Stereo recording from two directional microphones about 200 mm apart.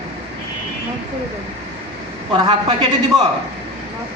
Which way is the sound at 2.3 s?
20° right (ahead or behind).